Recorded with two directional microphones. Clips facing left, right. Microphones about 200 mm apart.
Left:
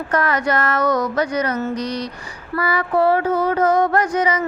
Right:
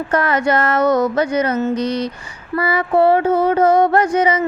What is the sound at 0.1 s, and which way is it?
Speech, 25° right (ahead or behind).